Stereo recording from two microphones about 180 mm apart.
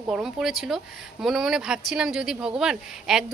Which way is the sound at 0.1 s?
Centre (ahead or behind).